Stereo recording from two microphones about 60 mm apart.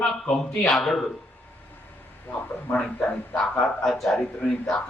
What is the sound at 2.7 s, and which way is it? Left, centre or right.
Speech, centre.